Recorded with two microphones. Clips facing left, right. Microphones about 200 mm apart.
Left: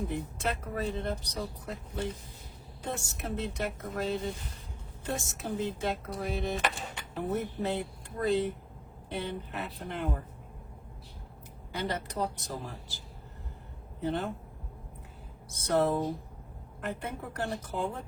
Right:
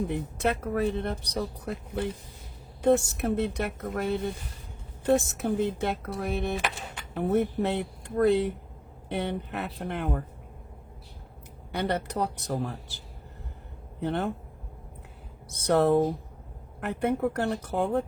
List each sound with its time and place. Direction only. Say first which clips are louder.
0.1 s speech: right 5 dB; 65° right (ahead or behind)
2.8 s speech: right 14 dB; 60° right (ahead or behind)
11.7 s speech: right 5 dB; 60° right (ahead or behind)
14.0 s speech: right 3 dB; 65° right (ahead or behind)
15.5 s speech: right 6 dB; 70° right (ahead or behind)